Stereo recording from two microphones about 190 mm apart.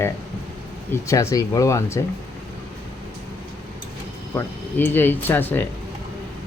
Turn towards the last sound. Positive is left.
turn(degrees=10)  # may be behind; listen again after turning